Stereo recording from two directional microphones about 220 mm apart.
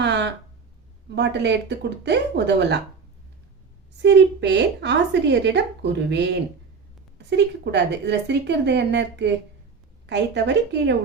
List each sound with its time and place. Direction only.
0.0 s a sound: 50° right (ahead or behind)
1.1 s a woman's voice: 50° right (ahead or behind)
4.0 s a woman's voice: 50° right (ahead or behind)